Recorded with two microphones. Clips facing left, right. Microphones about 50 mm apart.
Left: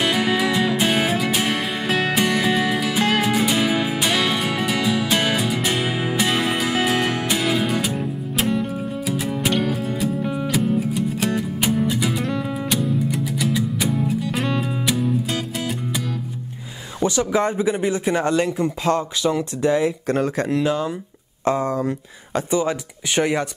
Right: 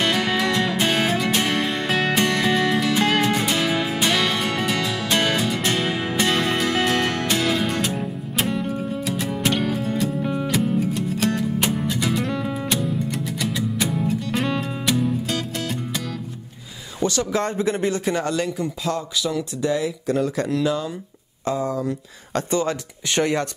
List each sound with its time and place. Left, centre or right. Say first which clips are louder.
0.0 s music: left 1 dB; centre
17.0 s speech: left 3 dB; centre
18.9 s speech: left 5 dB; left
19.3 s speech: left 3 dB; left
20.1 s speech: left 1 dB; left
21.5 s speech: left 3 dB; left
22.3 s speech: left 1 dB; centre